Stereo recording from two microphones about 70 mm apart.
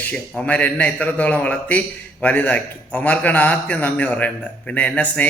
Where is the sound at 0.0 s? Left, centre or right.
Left.